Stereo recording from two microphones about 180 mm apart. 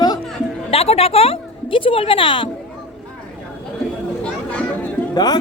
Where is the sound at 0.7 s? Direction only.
35° left (ahead or behind).